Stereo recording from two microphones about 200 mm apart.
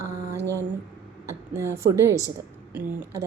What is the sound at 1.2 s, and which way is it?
A woman's voice, 15° right (ahead or behind).